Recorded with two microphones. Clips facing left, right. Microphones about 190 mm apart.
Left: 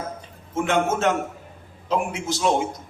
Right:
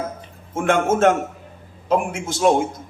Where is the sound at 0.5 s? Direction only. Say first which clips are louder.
Right 3 dB; 50° right (ahead or behind).